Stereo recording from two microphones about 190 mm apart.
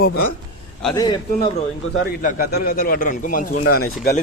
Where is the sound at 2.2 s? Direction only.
50° left (ahead or behind).